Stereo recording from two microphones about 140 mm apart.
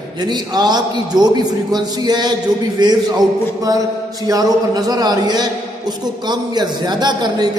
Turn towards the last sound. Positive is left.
turn(degrees=-30)  # may be behind; listen again after turning